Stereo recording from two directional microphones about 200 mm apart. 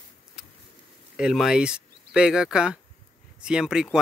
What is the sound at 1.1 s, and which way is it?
Speech, 5° right (ahead or behind).